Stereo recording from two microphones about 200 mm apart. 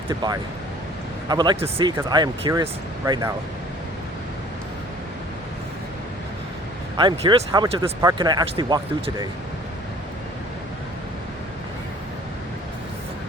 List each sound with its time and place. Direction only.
0.1 s speech: 20° right (ahead or behind)
6.9 s speech: 20° right (ahead or behind)